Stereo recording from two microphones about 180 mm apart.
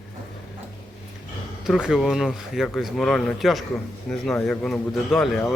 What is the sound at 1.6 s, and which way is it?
Speech, centre (ahead or behind).